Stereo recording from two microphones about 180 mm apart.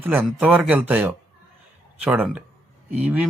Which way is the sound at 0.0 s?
10° right (ahead or behind).